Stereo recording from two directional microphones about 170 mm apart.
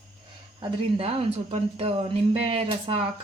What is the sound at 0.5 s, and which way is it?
Speech, 35° right (ahead or behind).